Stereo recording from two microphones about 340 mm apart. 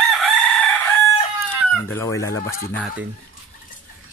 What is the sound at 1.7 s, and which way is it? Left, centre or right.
Speech, centre.